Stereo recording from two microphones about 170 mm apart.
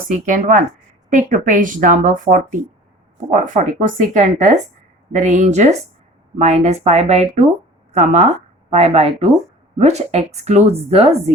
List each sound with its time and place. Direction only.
0.1 s a woman's voice: 50° right (ahead or behind)